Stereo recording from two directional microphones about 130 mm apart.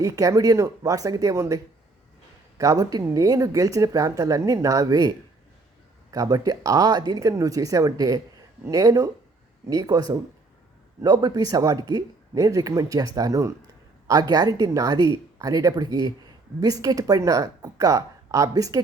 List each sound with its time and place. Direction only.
0.0 s speech: 25° right (ahead or behind)